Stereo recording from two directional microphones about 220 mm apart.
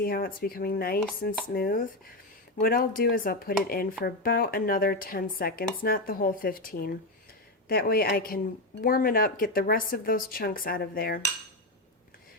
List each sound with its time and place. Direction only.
0.0 s speech: 40° left (ahead or behind)